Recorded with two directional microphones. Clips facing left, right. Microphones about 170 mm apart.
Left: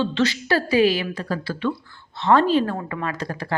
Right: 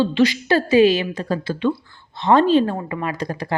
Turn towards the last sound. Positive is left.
turn(degrees=-15)  # may be behind; listen again after turning